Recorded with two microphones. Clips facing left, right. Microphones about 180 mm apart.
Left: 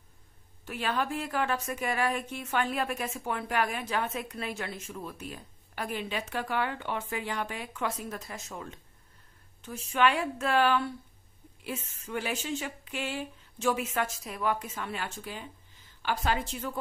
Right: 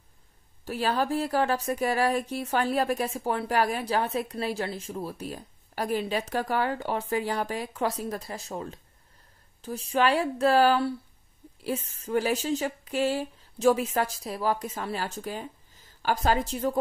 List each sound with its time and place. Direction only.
0.7 s speech: 35° right (ahead or behind)